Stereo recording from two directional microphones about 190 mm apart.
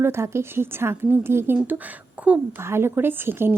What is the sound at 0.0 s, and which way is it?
A woman's voice, 15° right (ahead or behind).